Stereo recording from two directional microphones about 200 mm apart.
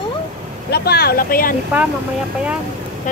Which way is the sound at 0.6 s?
50° left (ahead or behind).